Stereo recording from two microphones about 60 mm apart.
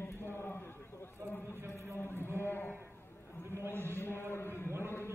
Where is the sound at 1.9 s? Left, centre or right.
Left.